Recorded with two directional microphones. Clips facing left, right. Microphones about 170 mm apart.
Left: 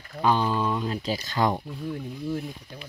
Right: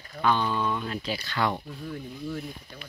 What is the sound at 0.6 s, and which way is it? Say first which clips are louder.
Speech: left 2 dB; 15° left (ahead or behind).